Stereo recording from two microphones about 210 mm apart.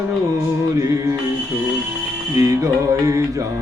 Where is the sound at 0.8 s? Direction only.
15° right (ahead or behind).